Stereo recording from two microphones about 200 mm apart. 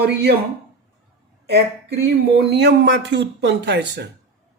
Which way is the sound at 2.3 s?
55° right (ahead or behind).